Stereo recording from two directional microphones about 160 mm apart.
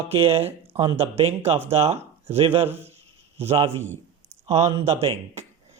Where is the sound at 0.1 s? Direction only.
40° right (ahead or behind).